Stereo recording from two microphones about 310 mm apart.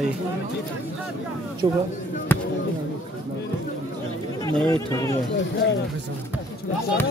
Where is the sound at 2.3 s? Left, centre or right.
Centre.